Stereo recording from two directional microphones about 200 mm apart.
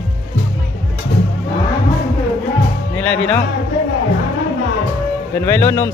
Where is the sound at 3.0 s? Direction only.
10° left (ahead or behind).